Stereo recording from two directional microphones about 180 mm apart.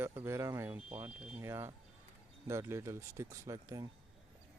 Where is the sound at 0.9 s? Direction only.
30° right (ahead or behind).